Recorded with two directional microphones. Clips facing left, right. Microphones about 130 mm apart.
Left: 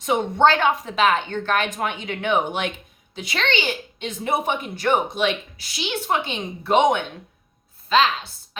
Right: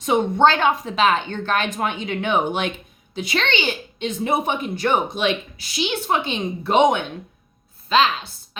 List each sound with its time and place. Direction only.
0.1 s a woman's voice: 20° right (ahead or behind)
7.9 s a woman's voice: 20° right (ahead or behind)